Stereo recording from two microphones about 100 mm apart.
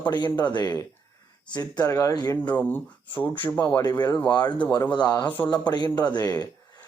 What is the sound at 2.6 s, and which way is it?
Speech, 20° left (ahead or behind).